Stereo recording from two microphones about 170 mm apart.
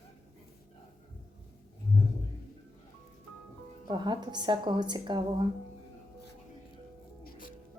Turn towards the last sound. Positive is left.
turn(degrees=55)  # may be behind; listen again after turning